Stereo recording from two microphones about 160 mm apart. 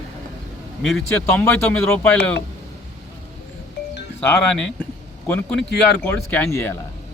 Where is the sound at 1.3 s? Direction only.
10° left (ahead or behind).